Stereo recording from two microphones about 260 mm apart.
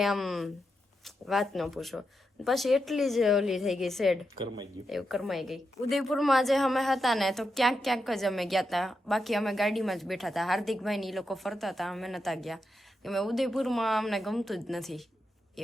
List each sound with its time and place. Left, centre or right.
0.0 s a woman's voice: centre
4.4 s speech: centre
4.9 s a woman's voice: centre